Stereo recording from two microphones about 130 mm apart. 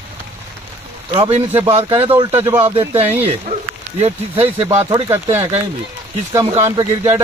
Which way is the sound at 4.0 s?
50° right (ahead or behind).